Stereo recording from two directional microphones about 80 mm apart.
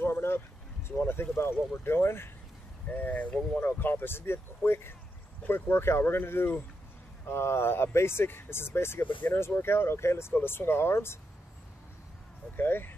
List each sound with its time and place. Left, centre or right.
0.0 s a sound: left
0.8 s speech: left
12.5 s speech: left